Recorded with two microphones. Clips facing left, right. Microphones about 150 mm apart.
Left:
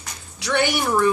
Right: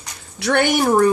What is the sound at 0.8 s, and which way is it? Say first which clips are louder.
Speech: right 7 dB; 40° right (ahead or behind).